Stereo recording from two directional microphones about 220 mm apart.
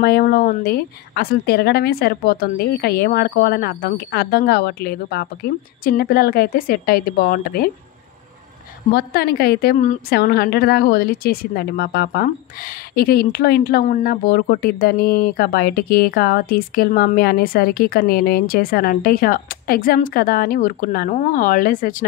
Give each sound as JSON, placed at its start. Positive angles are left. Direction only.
{"t": 0.0, "sound": "a woman's voice", "side_deg": 45}
{"t": 8.9, "sound": "a woman's voice", "side_deg": 45}